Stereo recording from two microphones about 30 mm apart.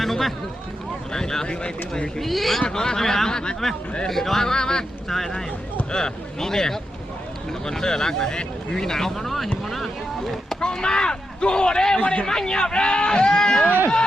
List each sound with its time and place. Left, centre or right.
0.0 s a sound: centre
1.1 s speech: left
1.5 s speech: left
2.2 s a man's voice: centre
2.6 s speech: left
4.0 s speech: centre
5.0 s speech: centre
9.1 s a man's voice: centre
10.6 s speech: left
11.9 s a man's voice: left
12.2 s speech: left